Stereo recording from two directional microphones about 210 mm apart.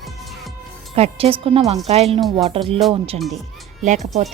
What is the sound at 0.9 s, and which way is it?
Speech, 30° right (ahead or behind).